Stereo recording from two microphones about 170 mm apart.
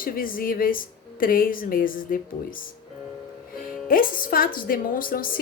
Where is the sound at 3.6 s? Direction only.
55° left (ahead or behind).